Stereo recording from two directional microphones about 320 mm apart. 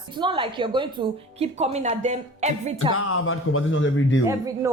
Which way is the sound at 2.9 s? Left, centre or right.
Left.